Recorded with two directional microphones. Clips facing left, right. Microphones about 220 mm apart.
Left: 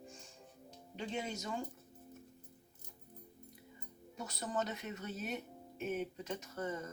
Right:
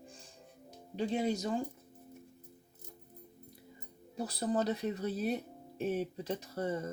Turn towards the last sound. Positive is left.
turn(degrees=-35)  # may be behind; listen again after turning